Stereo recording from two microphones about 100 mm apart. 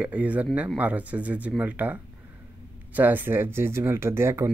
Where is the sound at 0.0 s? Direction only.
15° right (ahead or behind).